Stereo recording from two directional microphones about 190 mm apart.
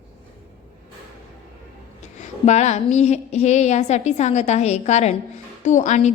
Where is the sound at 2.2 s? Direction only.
35° left (ahead or behind).